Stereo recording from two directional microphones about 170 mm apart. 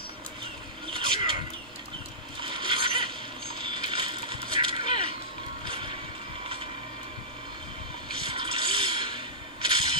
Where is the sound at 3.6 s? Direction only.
30° right (ahead or behind).